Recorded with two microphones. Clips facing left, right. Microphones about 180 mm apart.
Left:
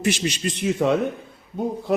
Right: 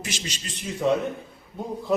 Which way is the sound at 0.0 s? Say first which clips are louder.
Left 12 dB; 60° left (ahead or behind).